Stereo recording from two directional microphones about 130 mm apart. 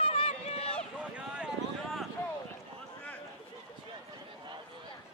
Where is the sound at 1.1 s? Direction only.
5° right (ahead or behind).